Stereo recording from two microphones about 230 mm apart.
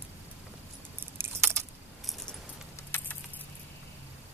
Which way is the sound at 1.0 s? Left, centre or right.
Centre.